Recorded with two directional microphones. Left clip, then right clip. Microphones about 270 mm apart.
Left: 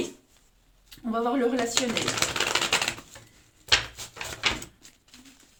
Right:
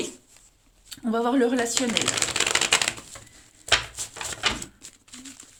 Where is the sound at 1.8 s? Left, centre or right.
Right.